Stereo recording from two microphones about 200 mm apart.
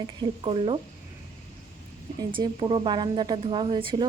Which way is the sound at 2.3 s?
25° right (ahead or behind).